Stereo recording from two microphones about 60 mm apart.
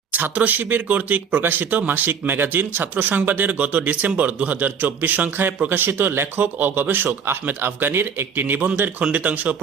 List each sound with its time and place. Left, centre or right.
0.1 s a man's voice: right